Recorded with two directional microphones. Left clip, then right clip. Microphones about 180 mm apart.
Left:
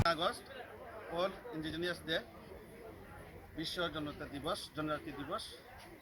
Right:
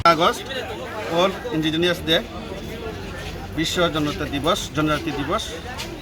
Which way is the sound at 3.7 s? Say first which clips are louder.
Right 18 dB; 20° left (ahead or behind).